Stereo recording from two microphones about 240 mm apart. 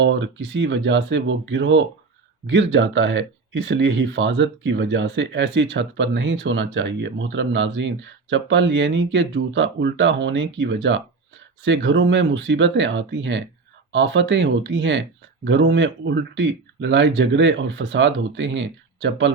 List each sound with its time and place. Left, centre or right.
0.0 s speech: right